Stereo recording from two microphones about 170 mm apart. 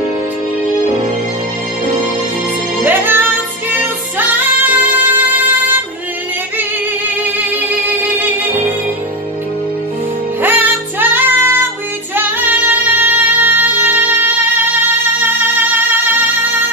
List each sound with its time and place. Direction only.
2.8 s music: 10° right (ahead or behind)
10.4 s music: 10° right (ahead or behind)